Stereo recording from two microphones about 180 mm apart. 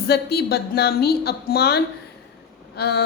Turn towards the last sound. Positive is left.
turn(degrees=65)  # may be behind; listen again after turning